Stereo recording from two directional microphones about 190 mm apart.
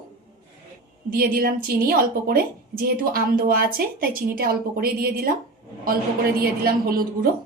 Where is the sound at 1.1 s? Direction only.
50° right (ahead or behind).